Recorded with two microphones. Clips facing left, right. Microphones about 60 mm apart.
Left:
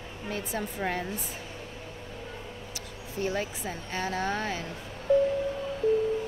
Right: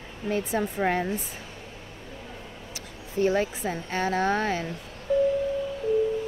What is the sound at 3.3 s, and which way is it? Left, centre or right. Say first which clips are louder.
Speech: right 6 dB; right.